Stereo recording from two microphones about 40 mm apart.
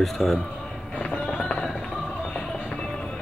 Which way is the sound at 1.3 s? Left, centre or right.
Left.